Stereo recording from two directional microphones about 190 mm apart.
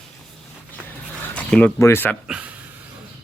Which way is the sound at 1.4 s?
5° left (ahead or behind).